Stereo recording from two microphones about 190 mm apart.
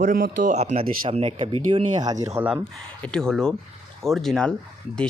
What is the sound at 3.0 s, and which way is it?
Speech, 5° left (ahead or behind).